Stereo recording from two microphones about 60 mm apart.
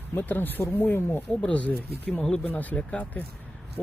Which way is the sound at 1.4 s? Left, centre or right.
Left.